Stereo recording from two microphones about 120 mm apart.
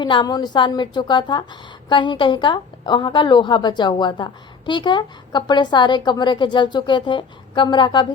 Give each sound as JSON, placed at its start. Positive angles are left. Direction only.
{"t": 0.0, "sound": "a woman's voice", "side_deg": 40}